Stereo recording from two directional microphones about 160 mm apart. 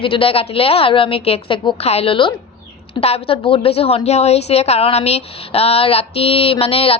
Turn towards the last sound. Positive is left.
turn(degrees=35)  # may be behind; listen again after turning